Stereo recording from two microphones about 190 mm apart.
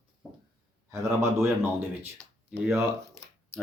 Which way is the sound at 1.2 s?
15° right (ahead or behind).